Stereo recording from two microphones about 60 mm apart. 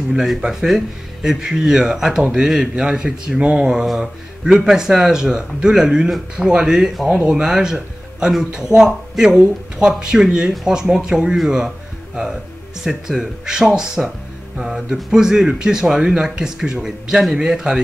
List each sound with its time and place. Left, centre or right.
0.1 s speech: centre
12.8 s speech: centre